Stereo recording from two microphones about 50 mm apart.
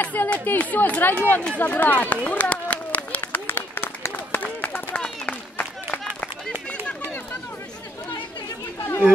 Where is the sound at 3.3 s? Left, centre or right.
Left.